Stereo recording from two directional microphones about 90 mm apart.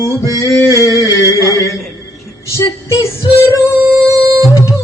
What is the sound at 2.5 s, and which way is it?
Speech, 35° left (ahead or behind).